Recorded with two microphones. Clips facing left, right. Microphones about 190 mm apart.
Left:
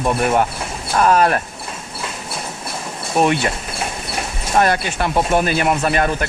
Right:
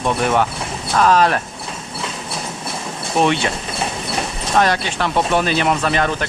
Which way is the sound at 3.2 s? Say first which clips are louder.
Even; 5° left (ahead or behind).